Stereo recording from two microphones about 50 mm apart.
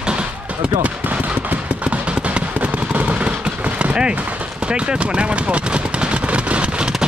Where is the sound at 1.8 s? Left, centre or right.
Right.